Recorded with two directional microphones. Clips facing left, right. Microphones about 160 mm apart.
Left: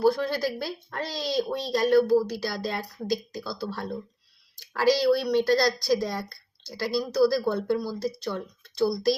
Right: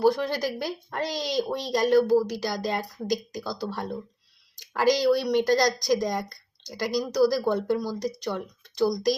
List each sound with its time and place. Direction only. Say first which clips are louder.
0.0 s speech: even; 15° right (ahead or behind)